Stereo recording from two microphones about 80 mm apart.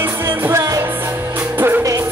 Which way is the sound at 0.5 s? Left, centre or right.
Right.